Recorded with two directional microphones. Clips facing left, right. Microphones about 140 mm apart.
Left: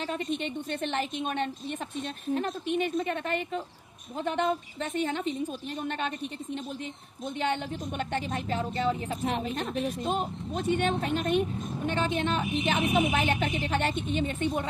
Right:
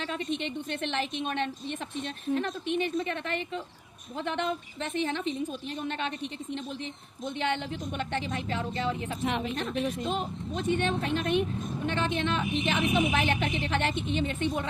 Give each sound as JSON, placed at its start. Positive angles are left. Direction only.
{"t": 0.0, "sound": "a woman's voice", "side_deg": 45}
{"t": 7.3, "sound": "a woman's voice", "side_deg": 40}